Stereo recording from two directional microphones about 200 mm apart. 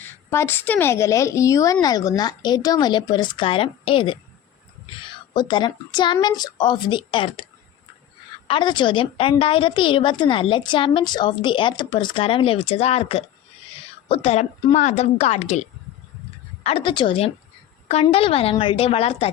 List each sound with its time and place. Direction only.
0.0 s a woman's voice: 10° left (ahead or behind)
5.3 s a woman's voice: 20° left (ahead or behind)
8.4 s a woman's voice: 25° left (ahead or behind)
16.6 s a woman's voice: 25° left (ahead or behind)